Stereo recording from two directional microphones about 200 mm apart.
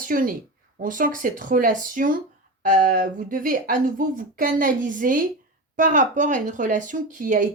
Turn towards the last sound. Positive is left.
turn(degrees=-40)  # may be behind; listen again after turning